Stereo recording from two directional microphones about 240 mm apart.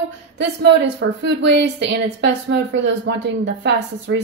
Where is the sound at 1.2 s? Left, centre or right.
Right.